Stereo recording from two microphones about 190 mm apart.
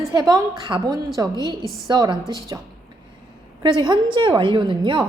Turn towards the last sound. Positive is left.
turn(degrees=-25)  # may be behind; listen again after turning